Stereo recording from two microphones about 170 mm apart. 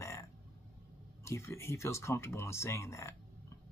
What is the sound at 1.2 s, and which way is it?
Speech, 15° left (ahead or behind).